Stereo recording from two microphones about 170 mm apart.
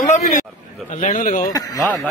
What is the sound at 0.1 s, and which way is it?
A man's voice, 45° left (ahead or behind).